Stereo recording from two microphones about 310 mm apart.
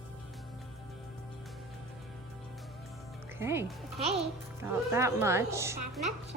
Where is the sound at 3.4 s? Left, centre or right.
Centre.